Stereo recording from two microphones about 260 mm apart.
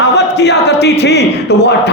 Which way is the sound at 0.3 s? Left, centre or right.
Left.